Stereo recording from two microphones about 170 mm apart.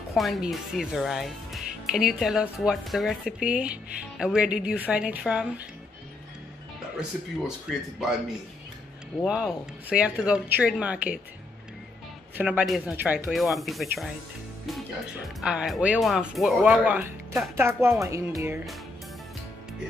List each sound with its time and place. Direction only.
0.1 s speech: centre (ahead or behind)
7.7 s speech: centre (ahead or behind)
9.2 s speech: 5° right (ahead or behind)
12.4 s speech: 5° right (ahead or behind)
15.4 s speech: 5° right (ahead or behind)